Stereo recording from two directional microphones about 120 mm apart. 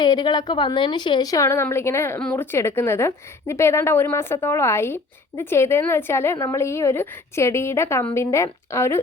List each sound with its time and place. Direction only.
0.0 s a woman's voice: 35° left (ahead or behind)